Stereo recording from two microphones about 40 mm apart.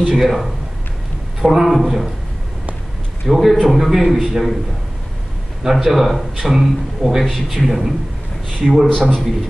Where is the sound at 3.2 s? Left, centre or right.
Centre.